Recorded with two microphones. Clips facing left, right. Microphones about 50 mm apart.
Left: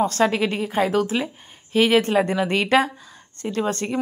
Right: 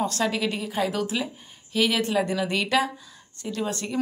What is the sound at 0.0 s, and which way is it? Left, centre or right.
A woman's voice, left.